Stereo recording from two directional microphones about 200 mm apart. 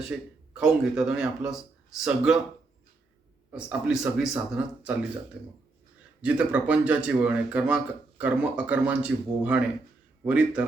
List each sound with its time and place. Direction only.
0.1 s speech: 5° right (ahead or behind)
3.5 s speech: 5° right (ahead or behind)
6.2 s speech: 5° right (ahead or behind)